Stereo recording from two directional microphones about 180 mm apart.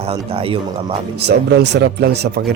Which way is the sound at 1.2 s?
65° right (ahead or behind).